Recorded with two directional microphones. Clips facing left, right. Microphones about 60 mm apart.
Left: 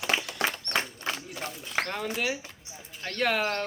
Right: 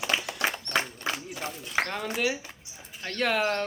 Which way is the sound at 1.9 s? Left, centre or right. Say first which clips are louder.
Right 1 dB; centre.